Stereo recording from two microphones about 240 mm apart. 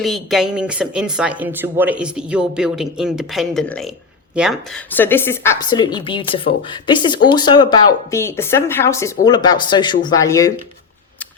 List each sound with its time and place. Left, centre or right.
0.0 s a woman's voice: centre